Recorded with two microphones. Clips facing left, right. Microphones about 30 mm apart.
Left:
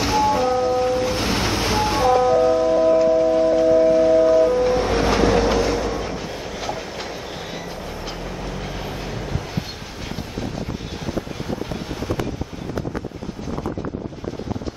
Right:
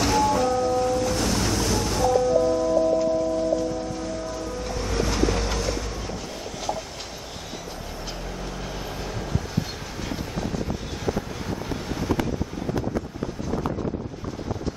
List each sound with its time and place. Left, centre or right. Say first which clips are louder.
0.0 s ocean: left 3 dB; centre
3.0 s train: left 7 dB; left
5.5 s music: left 8 dB; left
11.9 s vehicle: right 2 dB; centre